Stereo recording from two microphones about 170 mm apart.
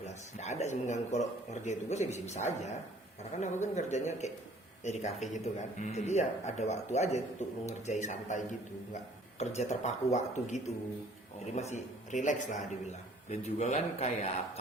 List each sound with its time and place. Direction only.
0.0 s a man's voice: 40° left (ahead or behind)